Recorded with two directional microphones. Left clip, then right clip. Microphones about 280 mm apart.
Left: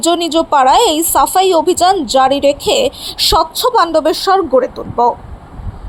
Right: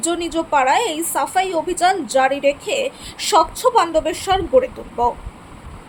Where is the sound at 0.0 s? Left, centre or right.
Centre.